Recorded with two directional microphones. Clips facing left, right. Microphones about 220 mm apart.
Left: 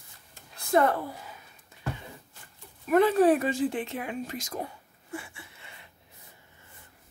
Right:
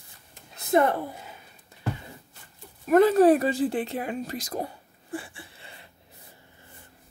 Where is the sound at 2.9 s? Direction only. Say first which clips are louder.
Right 3 dB; 40° right (ahead or behind).